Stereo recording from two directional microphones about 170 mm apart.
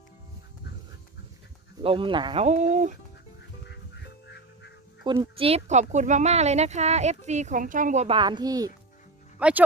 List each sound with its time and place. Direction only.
1.8 s speech: 30° right (ahead or behind)
2.4 s speech: 45° right (ahead or behind)
4.3 s music: 85° left
5.0 s a child's voice: 25° right (ahead or behind)
5.4 s speech: 40° right (ahead or behind)
8.0 s a child's voice: 30° right (ahead or behind)
9.4 s speech: 10° right (ahead or behind)